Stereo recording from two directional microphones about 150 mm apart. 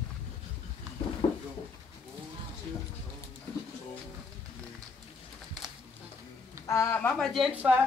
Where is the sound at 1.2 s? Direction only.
35° left (ahead or behind).